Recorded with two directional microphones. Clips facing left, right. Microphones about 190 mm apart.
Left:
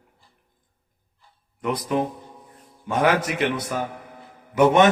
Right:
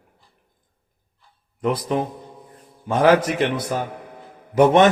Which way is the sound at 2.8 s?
35° right (ahead or behind).